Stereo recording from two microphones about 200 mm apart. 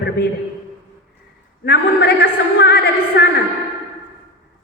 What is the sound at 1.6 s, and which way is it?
A woman's voice, 55° left (ahead or behind).